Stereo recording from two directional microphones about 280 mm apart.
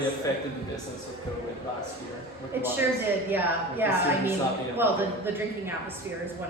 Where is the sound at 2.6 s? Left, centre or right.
Centre.